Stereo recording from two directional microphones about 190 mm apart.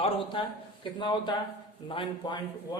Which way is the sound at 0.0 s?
25° left (ahead or behind).